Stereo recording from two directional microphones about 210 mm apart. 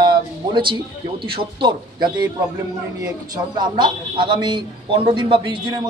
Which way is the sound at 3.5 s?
20° right (ahead or behind).